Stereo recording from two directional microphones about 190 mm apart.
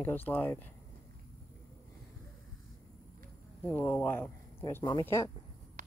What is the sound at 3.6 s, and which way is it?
Speech, 10° left (ahead or behind).